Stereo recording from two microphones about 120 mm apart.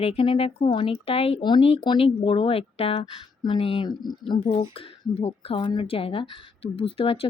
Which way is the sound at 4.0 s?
35° left (ahead or behind).